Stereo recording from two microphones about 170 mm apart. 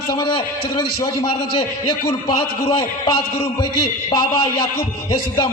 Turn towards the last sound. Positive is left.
turn(degrees=25)  # may be behind; listen again after turning